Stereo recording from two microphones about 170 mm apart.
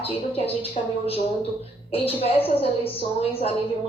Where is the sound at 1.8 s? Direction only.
35° left (ahead or behind).